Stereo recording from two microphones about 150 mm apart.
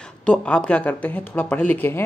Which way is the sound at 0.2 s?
5° left (ahead or behind).